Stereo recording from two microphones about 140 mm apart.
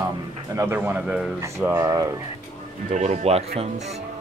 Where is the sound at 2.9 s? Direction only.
55° right (ahead or behind).